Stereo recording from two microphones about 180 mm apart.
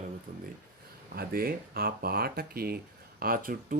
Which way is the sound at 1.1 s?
55° right (ahead or behind).